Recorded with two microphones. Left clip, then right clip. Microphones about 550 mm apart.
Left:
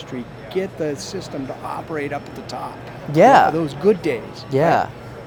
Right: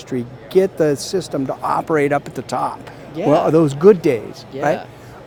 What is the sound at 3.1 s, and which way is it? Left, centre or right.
Speech, left.